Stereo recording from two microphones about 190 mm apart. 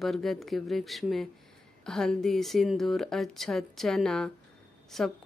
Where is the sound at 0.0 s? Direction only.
Centre (ahead or behind).